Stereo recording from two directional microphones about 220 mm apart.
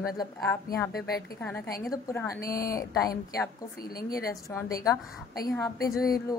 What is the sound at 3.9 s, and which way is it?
Speech, 45° left (ahead or behind).